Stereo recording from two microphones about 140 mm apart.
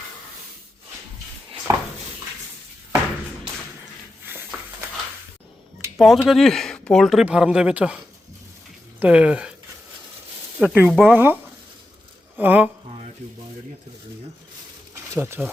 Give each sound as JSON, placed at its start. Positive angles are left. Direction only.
{"t": 1.7, "sound": "a sound", "side_deg": -25}
{"t": 4.3, "sound": "a sound", "side_deg": -15}
{"t": 6.0, "sound": "speech", "side_deg": 0}
{"t": 10.6, "sound": "speech", "side_deg": -5}
{"t": 12.4, "sound": "speech", "side_deg": -10}
{"t": 15.1, "sound": "speech", "side_deg": -15}